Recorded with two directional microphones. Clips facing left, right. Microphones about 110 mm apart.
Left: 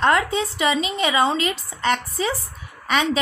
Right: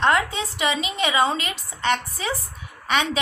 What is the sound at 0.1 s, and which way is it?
A woman's voice, 30° left (ahead or behind).